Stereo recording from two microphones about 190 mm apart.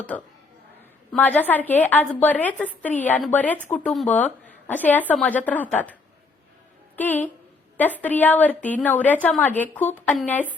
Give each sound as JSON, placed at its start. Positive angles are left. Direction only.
{"t": 0.1, "sound": "a woman's voice", "side_deg": 5}